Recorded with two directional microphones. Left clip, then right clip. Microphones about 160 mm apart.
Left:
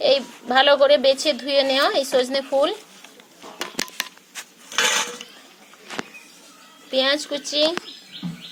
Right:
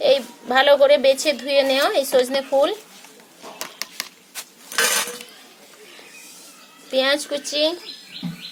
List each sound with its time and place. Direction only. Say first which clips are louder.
0.0 s a woman's voice: right 1 dB; 5° left (ahead or behind)
4.7 s cutlery: even; 50° right (ahead or behind)
6.9 s a woman's voice: right 1 dB; centre (ahead or behind)